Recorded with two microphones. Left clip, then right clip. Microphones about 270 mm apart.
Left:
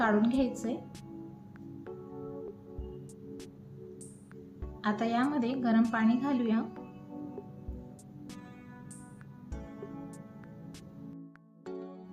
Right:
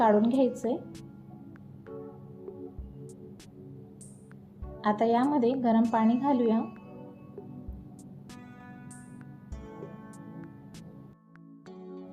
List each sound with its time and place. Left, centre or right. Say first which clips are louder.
0.0 s a woman's voice: right 5 dB; centre
4.8 s a woman's voice: right 5 dB; centre